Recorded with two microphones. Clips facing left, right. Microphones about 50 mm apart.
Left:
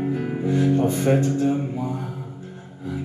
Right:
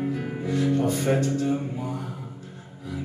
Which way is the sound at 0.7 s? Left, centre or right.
Left.